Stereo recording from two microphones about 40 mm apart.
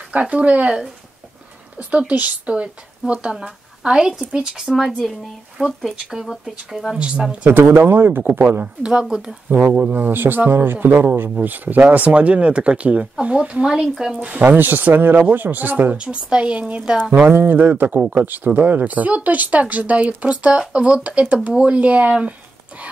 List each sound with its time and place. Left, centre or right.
0.1 s speech: right
1.8 s a woman's voice: right; by 4.7 s centre
4.7 s speech: centre
5.6 s speech: right
6.2 s speech: centre
7.0 s speech: right
7.4 s speech: right
8.2 s speech: right
12.1 s speech: right
13.7 s speech: centre
14.4 s speech: right
16.0 s speech: right
17.1 s speech: right